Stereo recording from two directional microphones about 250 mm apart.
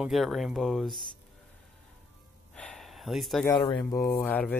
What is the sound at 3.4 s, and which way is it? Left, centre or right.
Speech, centre.